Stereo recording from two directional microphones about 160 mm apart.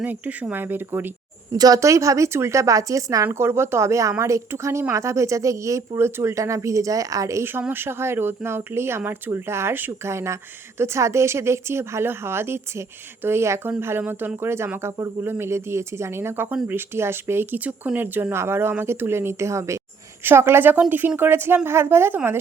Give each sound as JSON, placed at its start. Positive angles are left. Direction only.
{"t": 0.0, "sound": "a woman's voice", "side_deg": -10}
{"t": 1.5, "sound": "a woman's voice", "side_deg": -25}